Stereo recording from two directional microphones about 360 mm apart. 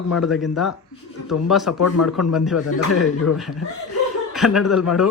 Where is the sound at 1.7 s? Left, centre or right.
Left.